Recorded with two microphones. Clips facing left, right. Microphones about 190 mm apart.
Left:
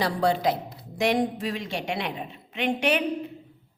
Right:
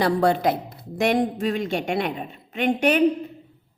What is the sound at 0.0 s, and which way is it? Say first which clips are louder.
A woman's voice: right 4 dB; 55° right (ahead or behind).